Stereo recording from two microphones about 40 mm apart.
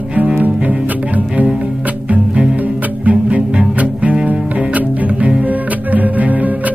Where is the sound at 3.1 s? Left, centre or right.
Right.